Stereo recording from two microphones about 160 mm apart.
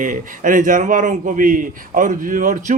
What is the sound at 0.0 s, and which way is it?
A man's voice, 55° right (ahead or behind).